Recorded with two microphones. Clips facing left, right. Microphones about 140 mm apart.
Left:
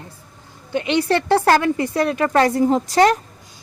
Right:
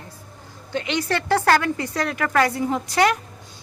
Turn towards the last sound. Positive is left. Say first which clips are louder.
# left 5 dB
turn(degrees=35)  # may be behind; listen again after turning